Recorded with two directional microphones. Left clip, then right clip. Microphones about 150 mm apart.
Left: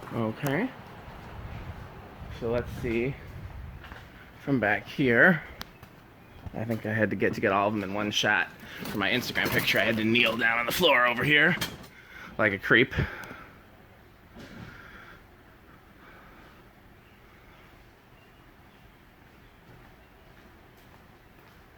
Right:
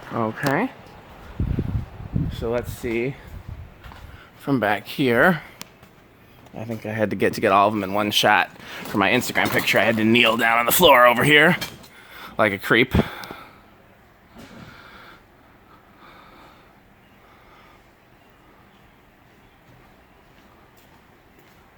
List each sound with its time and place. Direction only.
2.3 s speech: 40° right (ahead or behind)
4.4 s speech: 35° right (ahead or behind)
6.5 s speech: 10° right (ahead or behind)
7.1 s speech: 35° right (ahead or behind)